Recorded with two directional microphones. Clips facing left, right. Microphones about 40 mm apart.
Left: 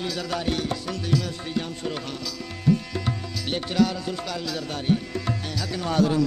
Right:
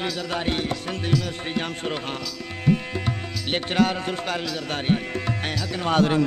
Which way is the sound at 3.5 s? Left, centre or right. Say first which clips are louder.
Right 1 dB; right.